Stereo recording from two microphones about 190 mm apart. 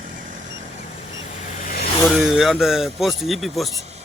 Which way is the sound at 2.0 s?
Centre (ahead or behind).